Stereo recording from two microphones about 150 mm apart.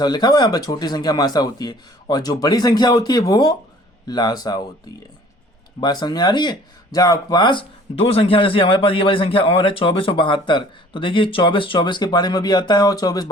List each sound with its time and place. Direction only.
0.0 s speech: 25° left (ahead or behind)
5.8 s speech: 25° left (ahead or behind)